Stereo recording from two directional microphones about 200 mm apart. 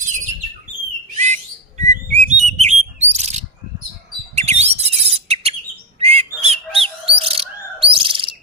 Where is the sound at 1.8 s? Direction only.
35° right (ahead or behind).